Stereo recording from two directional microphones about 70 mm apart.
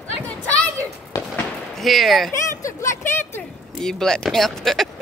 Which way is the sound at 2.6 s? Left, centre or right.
Left.